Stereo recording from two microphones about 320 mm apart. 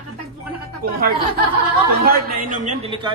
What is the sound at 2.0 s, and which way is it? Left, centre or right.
A man's voice, right.